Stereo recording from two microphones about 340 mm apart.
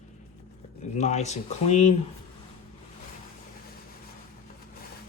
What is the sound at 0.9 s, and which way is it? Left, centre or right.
Speech, centre.